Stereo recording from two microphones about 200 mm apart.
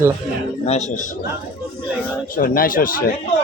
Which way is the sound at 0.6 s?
35° left (ahead or behind).